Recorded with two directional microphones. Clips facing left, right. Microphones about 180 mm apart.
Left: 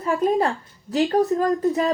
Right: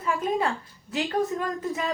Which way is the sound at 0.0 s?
40° left (ahead or behind).